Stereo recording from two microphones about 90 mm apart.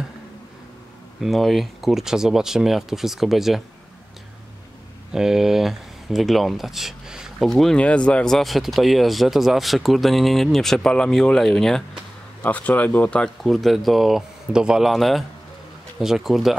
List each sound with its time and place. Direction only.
1.2 s speech: centre (ahead or behind)
5.1 s speech: 5° right (ahead or behind)
12.4 s speech: 15° left (ahead or behind)
13.4 s speech: centre (ahead or behind)